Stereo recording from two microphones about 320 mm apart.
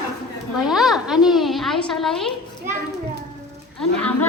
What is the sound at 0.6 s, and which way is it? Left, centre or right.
A woman's voice, centre.